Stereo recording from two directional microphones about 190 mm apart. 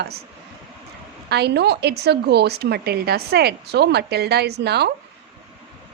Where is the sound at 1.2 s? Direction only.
60° right (ahead or behind).